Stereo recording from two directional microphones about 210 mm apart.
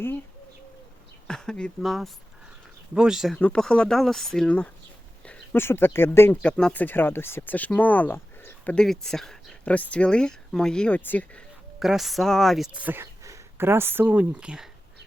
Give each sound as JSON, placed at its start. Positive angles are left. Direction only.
{"t": 1.3, "sound": "speech", "side_deg": 5}